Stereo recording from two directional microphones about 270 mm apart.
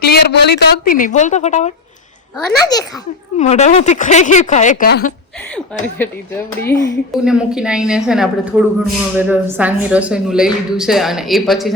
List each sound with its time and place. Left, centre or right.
0.0 s a woman's voice: left
3.3 s speech: left
6.0 s speech: centre
7.1 s a woman's voice: centre